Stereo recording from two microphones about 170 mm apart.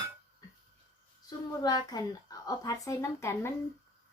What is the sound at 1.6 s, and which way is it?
Speech, 25° left (ahead or behind).